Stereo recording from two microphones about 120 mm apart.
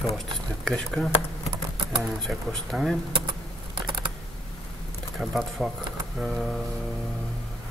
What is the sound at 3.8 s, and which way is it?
Typing, 40° right (ahead or behind).